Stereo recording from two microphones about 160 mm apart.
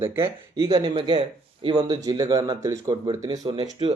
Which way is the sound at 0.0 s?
15° right (ahead or behind).